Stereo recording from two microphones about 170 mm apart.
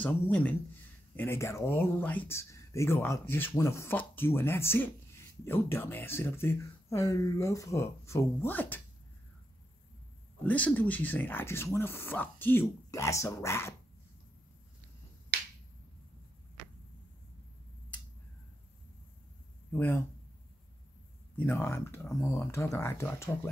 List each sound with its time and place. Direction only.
0.0 s speech: 10° left (ahead or behind)
10.4 s speech: 10° left (ahead or behind)
15.3 s finger snapping: 60° right (ahead or behind)
19.7 s speech: 15° left (ahead or behind)
21.4 s speech: 15° left (ahead or behind)